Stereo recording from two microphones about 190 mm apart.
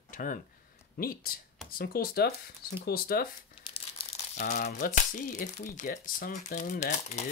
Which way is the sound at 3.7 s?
30° left (ahead or behind).